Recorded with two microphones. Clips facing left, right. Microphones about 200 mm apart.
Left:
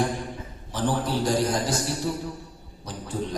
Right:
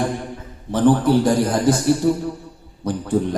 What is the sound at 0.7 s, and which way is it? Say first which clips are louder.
A man's voice: right 11 dB; 55° right (ahead or behind).